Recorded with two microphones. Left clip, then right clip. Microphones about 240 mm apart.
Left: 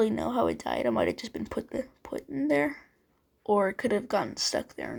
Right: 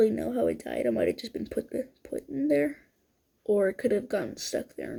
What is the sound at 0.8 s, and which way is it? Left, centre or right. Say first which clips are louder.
Speech: right 2 dB; left.